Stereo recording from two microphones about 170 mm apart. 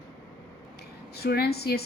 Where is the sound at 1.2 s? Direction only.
70° left (ahead or behind).